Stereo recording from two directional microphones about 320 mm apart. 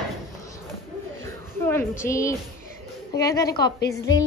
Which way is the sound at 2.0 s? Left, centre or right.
Centre.